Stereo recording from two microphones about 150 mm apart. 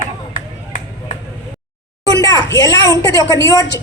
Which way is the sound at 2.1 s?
25° left (ahead or behind).